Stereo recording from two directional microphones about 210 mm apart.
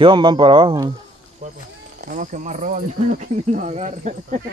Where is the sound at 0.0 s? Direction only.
20° right (ahead or behind).